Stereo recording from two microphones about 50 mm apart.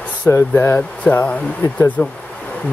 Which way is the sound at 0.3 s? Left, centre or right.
Left.